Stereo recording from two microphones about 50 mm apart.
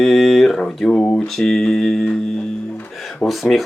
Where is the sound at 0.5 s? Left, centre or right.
Centre.